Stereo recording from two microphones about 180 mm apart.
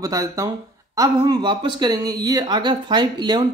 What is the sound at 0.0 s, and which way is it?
Speech, 20° right (ahead or behind).